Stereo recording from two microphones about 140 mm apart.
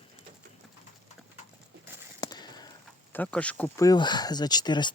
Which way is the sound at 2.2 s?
30° left (ahead or behind).